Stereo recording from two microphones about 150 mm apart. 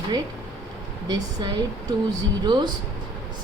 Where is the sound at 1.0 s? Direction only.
30° right (ahead or behind).